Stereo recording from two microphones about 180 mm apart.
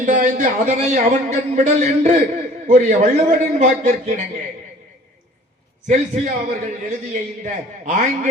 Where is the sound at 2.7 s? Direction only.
45° right (ahead or behind).